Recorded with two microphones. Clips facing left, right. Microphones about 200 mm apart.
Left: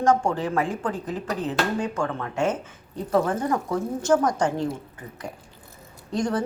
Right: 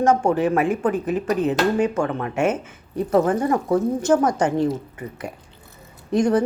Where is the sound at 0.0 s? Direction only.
20° right (ahead or behind).